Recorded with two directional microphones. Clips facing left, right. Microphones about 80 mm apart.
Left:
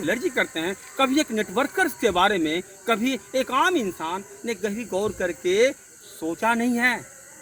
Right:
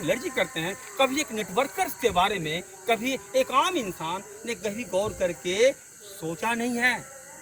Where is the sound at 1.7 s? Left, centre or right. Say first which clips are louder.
Left 4 dB; left.